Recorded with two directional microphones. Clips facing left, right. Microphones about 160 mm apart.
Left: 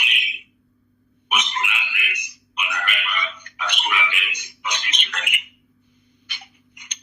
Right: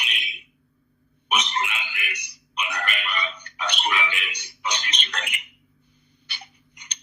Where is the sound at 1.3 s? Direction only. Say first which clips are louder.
Even; 35° right (ahead or behind).